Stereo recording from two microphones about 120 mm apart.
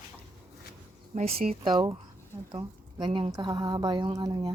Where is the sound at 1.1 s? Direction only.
55° right (ahead or behind).